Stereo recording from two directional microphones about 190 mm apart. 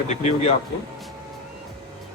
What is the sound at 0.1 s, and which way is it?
Speech, 35° left (ahead or behind).